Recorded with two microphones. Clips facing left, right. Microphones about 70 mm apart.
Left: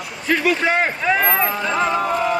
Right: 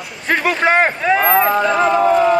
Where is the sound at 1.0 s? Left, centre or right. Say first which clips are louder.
Right 4 dB; centre.